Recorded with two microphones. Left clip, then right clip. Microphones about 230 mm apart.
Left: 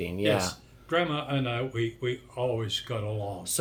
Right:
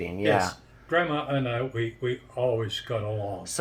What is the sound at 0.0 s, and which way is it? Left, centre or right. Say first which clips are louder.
A man's voice: right 3 dB; centre.